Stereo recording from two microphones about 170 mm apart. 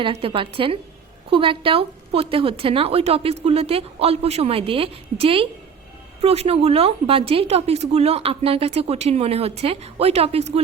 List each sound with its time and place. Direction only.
0.0 s a woman's voice: 35° right (ahead or behind)